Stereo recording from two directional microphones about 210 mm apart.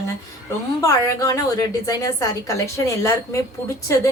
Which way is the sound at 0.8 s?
15° left (ahead or behind).